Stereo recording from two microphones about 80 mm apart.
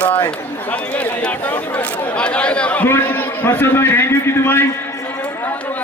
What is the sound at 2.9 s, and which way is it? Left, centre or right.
A man's voice, left.